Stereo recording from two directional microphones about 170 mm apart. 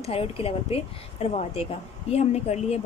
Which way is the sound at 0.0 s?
35° left (ahead or behind).